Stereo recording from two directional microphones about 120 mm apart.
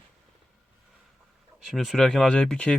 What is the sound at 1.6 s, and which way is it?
Speech, centre (ahead or behind).